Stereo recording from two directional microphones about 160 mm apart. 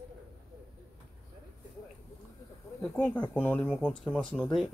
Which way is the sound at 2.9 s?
10° left (ahead or behind).